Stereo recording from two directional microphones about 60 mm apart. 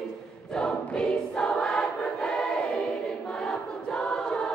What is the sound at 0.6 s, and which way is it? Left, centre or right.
Choir, centre.